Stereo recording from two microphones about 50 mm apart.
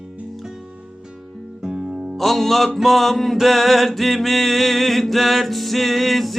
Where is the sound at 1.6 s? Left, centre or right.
Centre.